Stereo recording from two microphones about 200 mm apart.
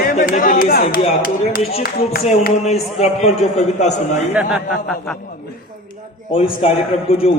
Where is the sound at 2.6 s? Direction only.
30° left (ahead or behind).